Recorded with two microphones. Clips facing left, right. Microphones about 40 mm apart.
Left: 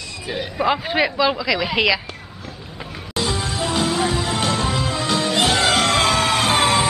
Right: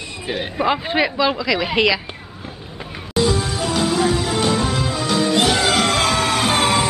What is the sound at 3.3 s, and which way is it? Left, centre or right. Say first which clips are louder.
Music: right 3 dB; centre.